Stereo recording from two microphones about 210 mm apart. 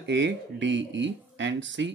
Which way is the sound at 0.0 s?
60° right (ahead or behind).